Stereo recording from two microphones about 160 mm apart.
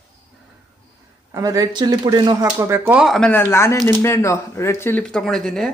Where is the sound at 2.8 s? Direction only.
5° right (ahead or behind).